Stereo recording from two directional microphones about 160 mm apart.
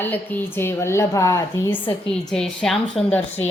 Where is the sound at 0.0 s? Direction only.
10° left (ahead or behind).